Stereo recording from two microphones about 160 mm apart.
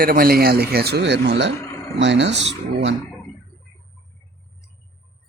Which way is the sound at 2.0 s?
90° right.